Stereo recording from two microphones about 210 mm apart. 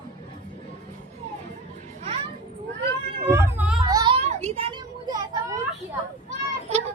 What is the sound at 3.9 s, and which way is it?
Music, 15° right (ahead or behind).